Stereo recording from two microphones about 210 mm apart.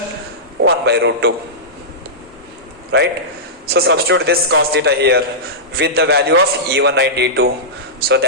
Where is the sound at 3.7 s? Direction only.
50° right (ahead or behind).